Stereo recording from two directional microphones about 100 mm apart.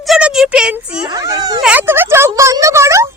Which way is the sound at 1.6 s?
20° right (ahead or behind).